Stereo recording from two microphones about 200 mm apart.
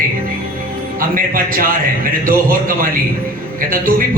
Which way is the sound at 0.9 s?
45° right (ahead or behind).